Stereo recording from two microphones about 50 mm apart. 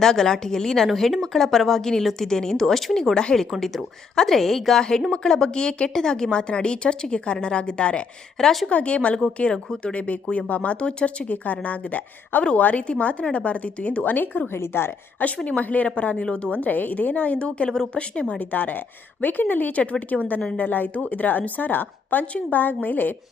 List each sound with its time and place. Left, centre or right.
0.0 s a woman's voice: centre
8.4 s a woman's voice: centre
8.7 s a woman's voice: left
9.4 s a woman's voice: centre
9.9 s a woman's voice: left
14.5 s a woman's voice: left
15.4 s a woman's voice: left
17.7 s a woman's voice: centre; by 23.1 s left